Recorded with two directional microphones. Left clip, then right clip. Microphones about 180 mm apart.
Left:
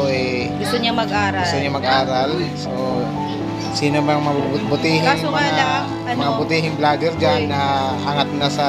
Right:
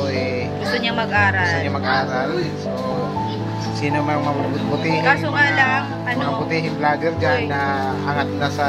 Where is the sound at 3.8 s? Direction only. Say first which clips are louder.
Left 3 dB; 50° left (ahead or behind).